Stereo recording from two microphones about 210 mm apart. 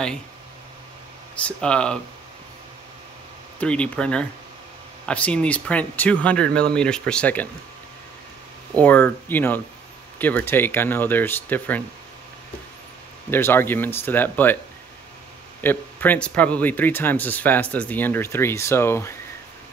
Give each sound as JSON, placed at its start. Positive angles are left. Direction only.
{"t": 1.4, "sound": "speech", "side_deg": 5}
{"t": 3.5, "sound": "speech", "side_deg": 5}
{"t": 8.7, "sound": "speech", "side_deg": 10}
{"t": 13.3, "sound": "speech", "side_deg": 10}
{"t": 15.6, "sound": "speech", "side_deg": 10}